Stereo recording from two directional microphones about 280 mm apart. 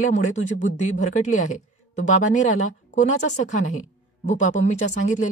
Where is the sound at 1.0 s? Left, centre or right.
Left.